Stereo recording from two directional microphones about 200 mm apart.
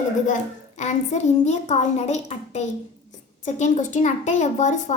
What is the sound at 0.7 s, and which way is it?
A woman's voice, 35° left (ahead or behind).